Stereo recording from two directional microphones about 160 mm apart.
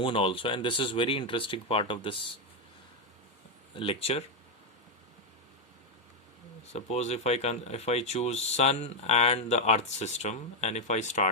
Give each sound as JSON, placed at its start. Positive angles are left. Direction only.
{"t": 0.0, "sound": "speech", "side_deg": 35}
{"t": 3.8, "sound": "speech", "side_deg": 35}
{"t": 6.7, "sound": "speech", "side_deg": 45}